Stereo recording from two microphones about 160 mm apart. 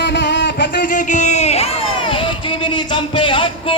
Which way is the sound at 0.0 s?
90° left.